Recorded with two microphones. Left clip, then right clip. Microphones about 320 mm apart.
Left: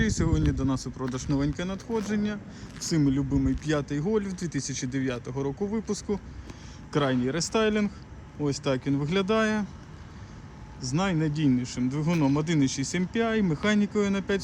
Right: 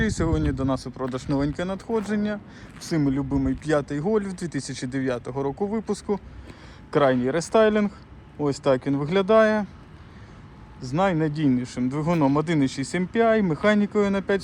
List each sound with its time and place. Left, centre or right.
0.0 s speech: centre
5.3 s speech: right
6.9 s speech: centre
10.8 s speech: centre